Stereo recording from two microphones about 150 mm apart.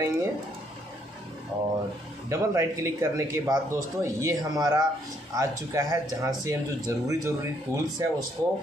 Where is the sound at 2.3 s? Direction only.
20° right (ahead or behind).